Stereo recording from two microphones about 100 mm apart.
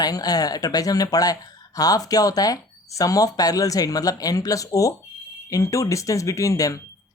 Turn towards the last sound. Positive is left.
turn(degrees=35)  # may be behind; listen again after turning